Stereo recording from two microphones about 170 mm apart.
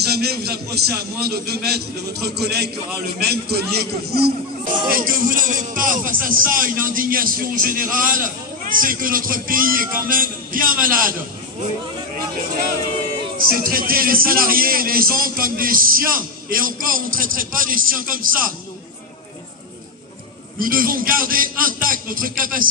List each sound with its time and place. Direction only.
0.0 s a man's voice: 70° right (ahead or behind)
4.8 s a man's voice: 55° right (ahead or behind)
13.5 s a man's voice: 55° right (ahead or behind)
20.5 s a man's voice: 55° right (ahead or behind)